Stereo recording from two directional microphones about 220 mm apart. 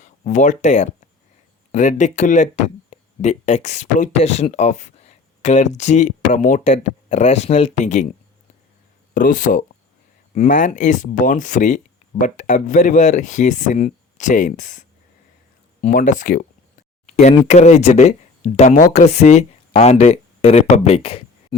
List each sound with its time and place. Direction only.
0.0 s speech: 35° left (ahead or behind)
9.1 s speech: 35° left (ahead or behind)